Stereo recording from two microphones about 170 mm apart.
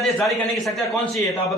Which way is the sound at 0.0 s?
Centre (ahead or behind).